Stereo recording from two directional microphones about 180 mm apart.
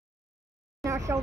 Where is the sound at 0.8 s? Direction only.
15° right (ahead or behind).